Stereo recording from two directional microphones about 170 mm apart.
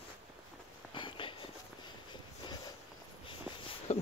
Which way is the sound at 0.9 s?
30° left (ahead or behind).